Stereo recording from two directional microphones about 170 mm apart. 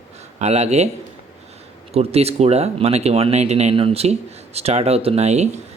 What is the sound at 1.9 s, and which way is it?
Speech, 35° right (ahead or behind).